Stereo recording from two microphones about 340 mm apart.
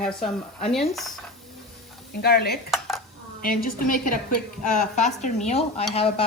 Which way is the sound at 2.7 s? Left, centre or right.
Centre.